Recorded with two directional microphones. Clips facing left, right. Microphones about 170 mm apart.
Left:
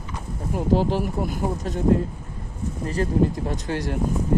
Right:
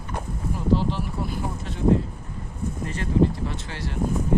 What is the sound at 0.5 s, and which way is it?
Speech, 45° left (ahead or behind).